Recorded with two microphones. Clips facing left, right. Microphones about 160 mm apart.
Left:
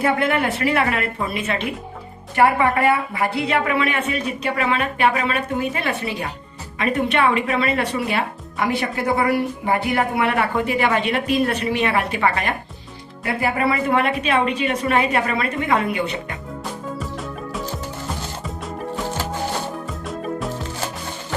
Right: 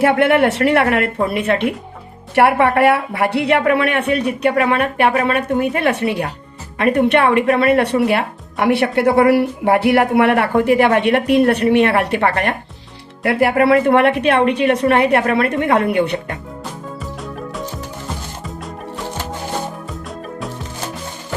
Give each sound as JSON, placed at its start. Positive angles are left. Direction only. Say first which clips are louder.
{"t": 0.0, "sound": "speech", "louder": "right 7 dB", "side_deg": -70}